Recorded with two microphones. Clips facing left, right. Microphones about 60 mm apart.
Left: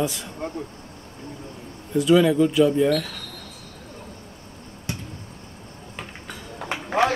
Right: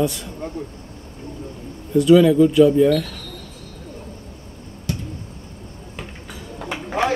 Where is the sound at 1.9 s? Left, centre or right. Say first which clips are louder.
Right 5 dB; centre.